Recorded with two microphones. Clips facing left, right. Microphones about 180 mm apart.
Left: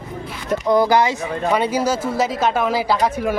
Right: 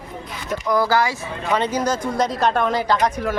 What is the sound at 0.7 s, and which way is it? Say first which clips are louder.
Speech: left 3 dB; 20° left (ahead or behind).